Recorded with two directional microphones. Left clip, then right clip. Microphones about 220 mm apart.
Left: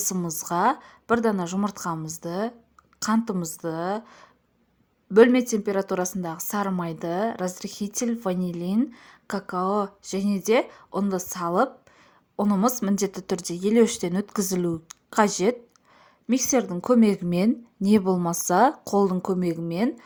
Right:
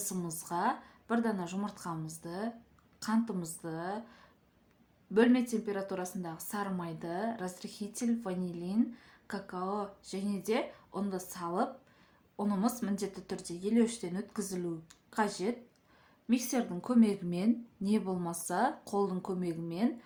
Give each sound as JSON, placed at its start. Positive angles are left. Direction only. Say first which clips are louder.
{"t": 0.0, "sound": "a woman's voice", "louder": "left 11 dB", "side_deg": 40}